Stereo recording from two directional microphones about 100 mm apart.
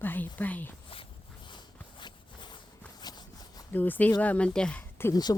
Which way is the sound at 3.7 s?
15° left (ahead or behind).